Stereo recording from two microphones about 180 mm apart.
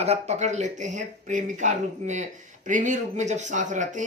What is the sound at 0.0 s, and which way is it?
A woman's voice, 35° right (ahead or behind).